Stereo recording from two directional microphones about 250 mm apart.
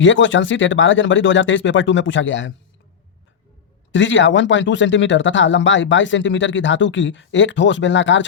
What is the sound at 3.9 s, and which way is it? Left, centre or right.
Speech, left.